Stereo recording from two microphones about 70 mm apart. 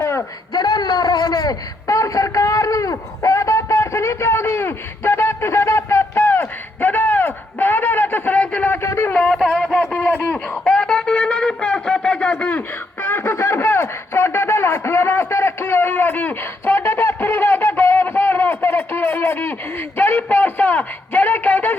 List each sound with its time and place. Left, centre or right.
0.0 s a sound: left
0.5 s speech: left
2.9 s a man's voice: left; by 8.8 s centre
8.8 s speech: left
9.1 s a man's voice: centre
10.7 s a sound: centre; by 19.5 s left
20.0 s a man's voice: left